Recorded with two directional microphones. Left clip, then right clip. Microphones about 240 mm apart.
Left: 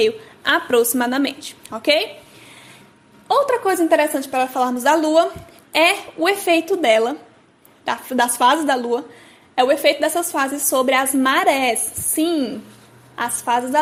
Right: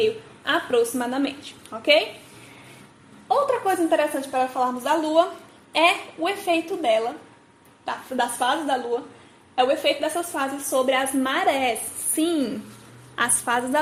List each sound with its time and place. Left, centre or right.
0.0 s a woman's voice: left
3.2 s a woman's voice: left; by 13.7 s centre